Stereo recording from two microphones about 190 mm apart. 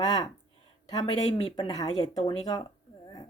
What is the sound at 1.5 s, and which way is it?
Speech, 20° left (ahead or behind).